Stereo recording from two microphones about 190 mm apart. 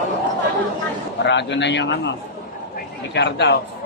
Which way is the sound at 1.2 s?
70° left (ahead or behind).